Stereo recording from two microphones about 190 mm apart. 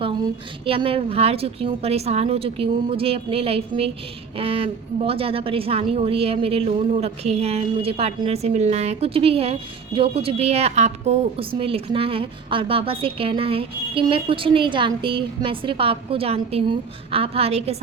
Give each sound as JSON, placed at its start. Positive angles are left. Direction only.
{"t": 0.6, "sound": "a woman's voice", "side_deg": -30}